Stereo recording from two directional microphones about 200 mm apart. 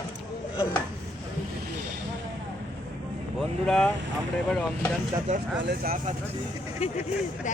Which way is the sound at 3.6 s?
5° left (ahead or behind).